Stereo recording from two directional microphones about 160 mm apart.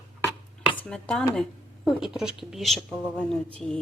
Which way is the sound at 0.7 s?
10° left (ahead or behind).